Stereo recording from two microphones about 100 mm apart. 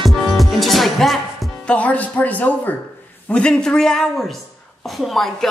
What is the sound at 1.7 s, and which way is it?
A woman's voice, 15° left (ahead or behind).